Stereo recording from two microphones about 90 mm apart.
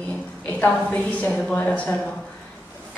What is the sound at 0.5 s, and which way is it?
A woman's voice, 15° left (ahead or behind).